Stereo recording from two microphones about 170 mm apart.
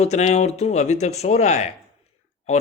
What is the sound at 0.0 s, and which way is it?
Speech, 40° left (ahead or behind).